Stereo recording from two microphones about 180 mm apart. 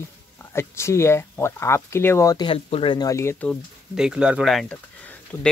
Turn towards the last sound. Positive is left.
turn(degrees=0)  # may be behind; listen again after turning